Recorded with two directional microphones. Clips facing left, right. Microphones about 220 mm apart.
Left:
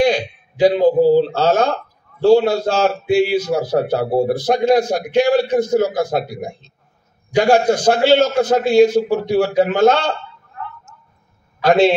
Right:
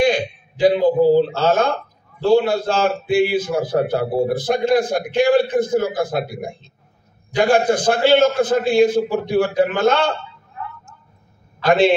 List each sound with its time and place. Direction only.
0.0 s a man's voice: 55° right (ahead or behind)
11.6 s a man's voice: 55° right (ahead or behind)